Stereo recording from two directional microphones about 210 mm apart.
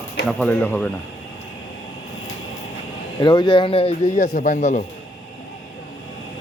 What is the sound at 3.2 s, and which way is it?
A man's voice, 20° left (ahead or behind).